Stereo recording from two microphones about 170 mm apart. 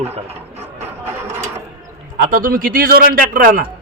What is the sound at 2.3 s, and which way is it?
A man's voice, 55° right (ahead or behind).